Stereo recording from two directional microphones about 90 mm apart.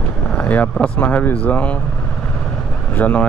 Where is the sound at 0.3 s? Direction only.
15° left (ahead or behind).